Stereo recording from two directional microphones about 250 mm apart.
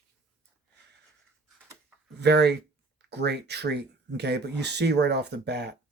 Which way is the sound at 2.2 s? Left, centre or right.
Right.